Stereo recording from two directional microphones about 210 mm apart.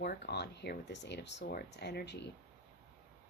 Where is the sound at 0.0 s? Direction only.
50° left (ahead or behind).